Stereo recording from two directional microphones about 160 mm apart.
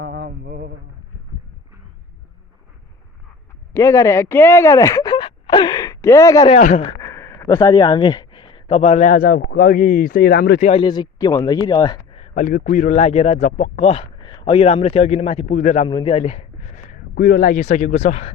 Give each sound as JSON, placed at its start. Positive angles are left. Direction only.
{"t": 0.0, "sound": "mantra", "side_deg": -90}
{"t": 3.7, "sound": "a sound", "side_deg": 20}
{"t": 6.5, "sound": "speech", "side_deg": 45}
{"t": 7.0, "sound": "a sound", "side_deg": 15}
{"t": 9.0, "sound": "speech", "side_deg": 60}
{"t": 10.6, "sound": "a man's voice", "side_deg": 40}
{"t": 10.8, "sound": "speech", "side_deg": 25}
{"t": 12.1, "sound": "a man's voice", "side_deg": 45}
{"t": 15.9, "sound": "speech", "side_deg": 30}
{"t": 17.2, "sound": "speech", "side_deg": 70}
{"t": 17.6, "sound": "speech", "side_deg": 50}